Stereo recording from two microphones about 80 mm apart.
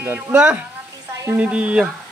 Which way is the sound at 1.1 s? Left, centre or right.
Right.